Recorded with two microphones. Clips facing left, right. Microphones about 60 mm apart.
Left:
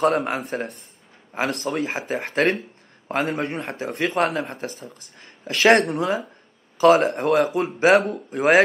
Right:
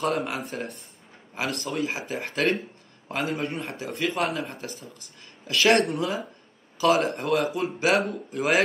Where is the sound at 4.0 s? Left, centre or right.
Left.